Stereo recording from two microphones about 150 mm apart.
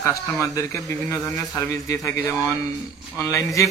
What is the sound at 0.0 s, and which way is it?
Speech, 20° left (ahead or behind).